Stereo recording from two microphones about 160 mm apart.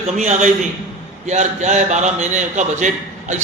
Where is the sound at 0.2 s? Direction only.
45° right (ahead or behind).